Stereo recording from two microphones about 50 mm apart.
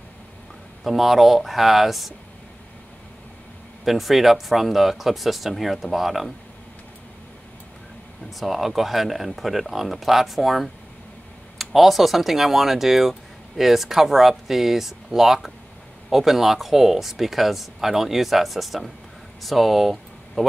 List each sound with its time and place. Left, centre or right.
0.8 s speech: centre
3.8 s speech: centre
8.4 s speech: centre